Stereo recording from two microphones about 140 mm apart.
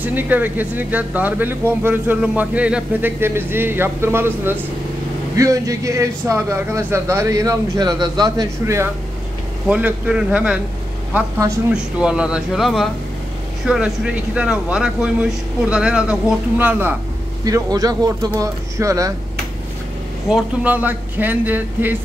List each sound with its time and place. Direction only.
0.0 s speech: 15° right (ahead or behind)
9.7 s speech: 10° right (ahead or behind)
11.1 s speech: 20° right (ahead or behind)
11.7 s speech: 5° right (ahead or behind)
17.5 s speech: 25° right (ahead or behind)
20.2 s speech: 10° right (ahead or behind)